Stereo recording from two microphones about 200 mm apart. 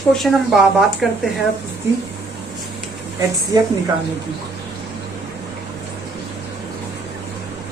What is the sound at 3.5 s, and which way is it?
Speech, 20° right (ahead or behind).